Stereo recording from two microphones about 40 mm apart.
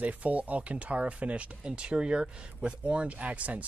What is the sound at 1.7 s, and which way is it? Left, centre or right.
Speech, right.